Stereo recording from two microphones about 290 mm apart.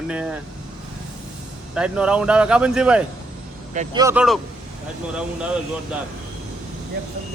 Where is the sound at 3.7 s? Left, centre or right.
Right.